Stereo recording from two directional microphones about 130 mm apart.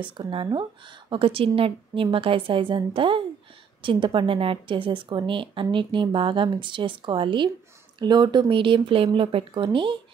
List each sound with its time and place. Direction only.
0.0 s a woman's voice: 40° right (ahead or behind)